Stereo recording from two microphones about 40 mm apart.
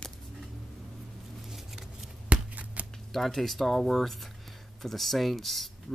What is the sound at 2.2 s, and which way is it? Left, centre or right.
Shuffling cards, right.